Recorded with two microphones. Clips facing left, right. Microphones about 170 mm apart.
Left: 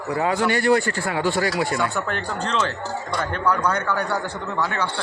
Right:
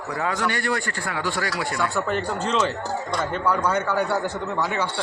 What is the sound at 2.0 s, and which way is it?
Speech, 5° right (ahead or behind).